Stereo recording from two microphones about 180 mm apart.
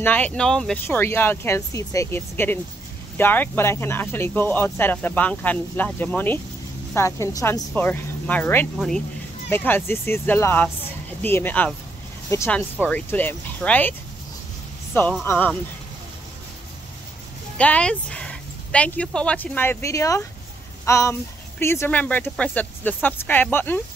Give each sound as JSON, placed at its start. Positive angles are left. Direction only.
{"t": 0.0, "sound": "speech", "side_deg": 10}
{"t": 15.2, "sound": "speech", "side_deg": 10}
{"t": 17.6, "sound": "speech", "side_deg": 5}